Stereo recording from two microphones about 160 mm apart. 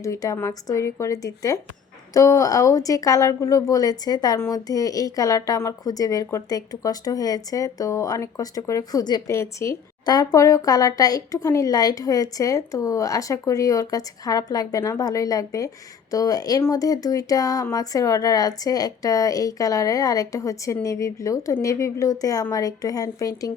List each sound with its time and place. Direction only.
0.0 s a woman's voice: 20° left (ahead or behind)